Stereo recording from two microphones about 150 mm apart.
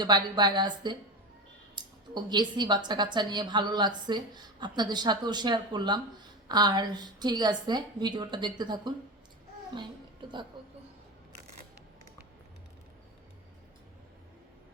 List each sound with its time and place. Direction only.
0.0 s a woman's voice: 30° right (ahead or behind)